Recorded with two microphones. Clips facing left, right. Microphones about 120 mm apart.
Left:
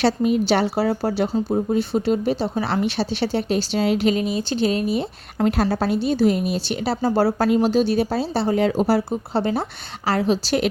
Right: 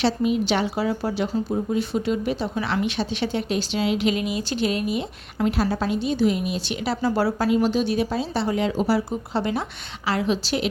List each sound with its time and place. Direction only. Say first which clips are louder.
0.0 s a woman's voice: left 3 dB; 45° left (ahead or behind); by 7.3 s 30° left (ahead or behind)
7.3 s a woman's voice: left 3 dB; 45° left (ahead or behind)